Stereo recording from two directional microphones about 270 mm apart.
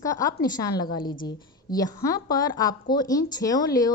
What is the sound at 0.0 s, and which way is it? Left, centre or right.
Speech, centre.